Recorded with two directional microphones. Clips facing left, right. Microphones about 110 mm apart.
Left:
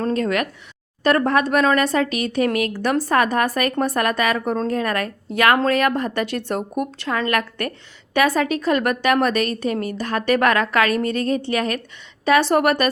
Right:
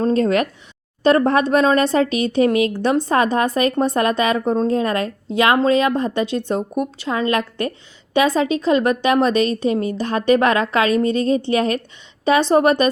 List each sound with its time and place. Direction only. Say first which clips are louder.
0.0 s a woman's voice: right 4 dB; 30° right (ahead or behind)